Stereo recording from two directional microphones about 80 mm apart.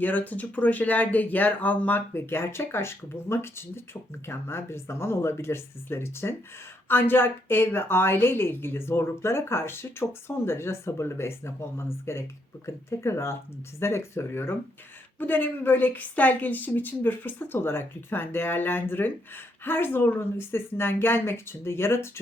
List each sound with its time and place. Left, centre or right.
0.0 s a woman's voice: left